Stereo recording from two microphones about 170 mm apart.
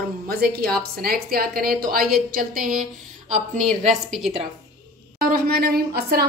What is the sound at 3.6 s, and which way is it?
Speech, centre (ahead or behind).